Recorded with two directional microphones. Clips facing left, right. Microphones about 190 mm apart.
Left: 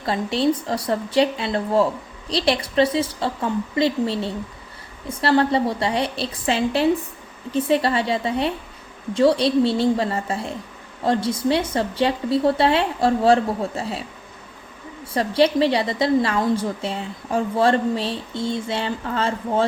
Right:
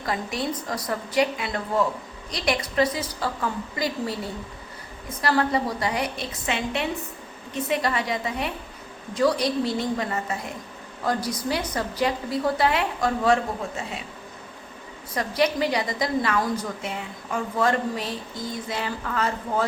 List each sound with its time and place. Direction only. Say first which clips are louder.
0.0 s a woman's voice: left 7 dB; 30° left (ahead or behind)
15.1 s a woman's voice: left 6 dB; 30° left (ahead or behind)